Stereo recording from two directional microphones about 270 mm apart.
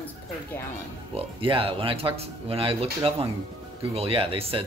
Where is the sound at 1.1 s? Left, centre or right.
Centre.